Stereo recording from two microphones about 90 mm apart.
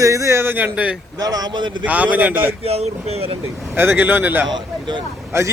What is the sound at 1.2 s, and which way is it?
Speech, 45° right (ahead or behind).